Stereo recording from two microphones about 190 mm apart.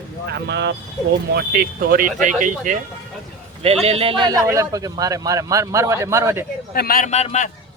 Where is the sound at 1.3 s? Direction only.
55° right (ahead or behind); by 6.4 s 15° right (ahead or behind).